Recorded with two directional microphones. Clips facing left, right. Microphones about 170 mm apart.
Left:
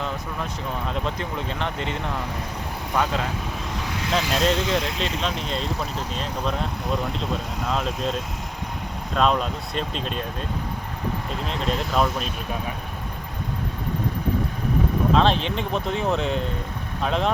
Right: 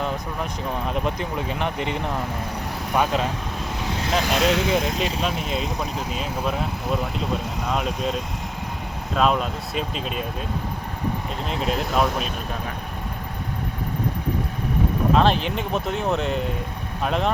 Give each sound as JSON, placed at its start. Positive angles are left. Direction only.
{"t": 0.7, "sound": "speech", "side_deg": -15}
{"t": 4.1, "sound": "speech", "side_deg": -5}
{"t": 11.4, "sound": "speech", "side_deg": -5}
{"t": 15.1, "sound": "speech", "side_deg": -5}